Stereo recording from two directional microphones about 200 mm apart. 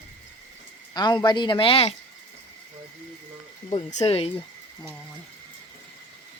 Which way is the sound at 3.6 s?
35° left (ahead or behind).